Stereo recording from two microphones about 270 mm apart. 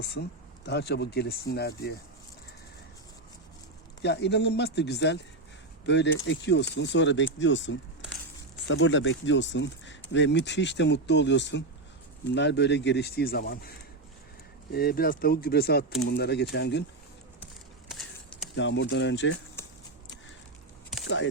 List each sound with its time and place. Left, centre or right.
0.0 s speech: left
4.0 s speech: left
17.8 s a sound: centre
18.5 s speech: left